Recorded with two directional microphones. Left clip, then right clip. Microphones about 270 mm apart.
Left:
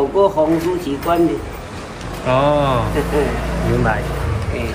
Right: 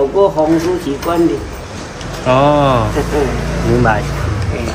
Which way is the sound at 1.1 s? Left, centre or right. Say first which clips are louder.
Right 1 dB; centre.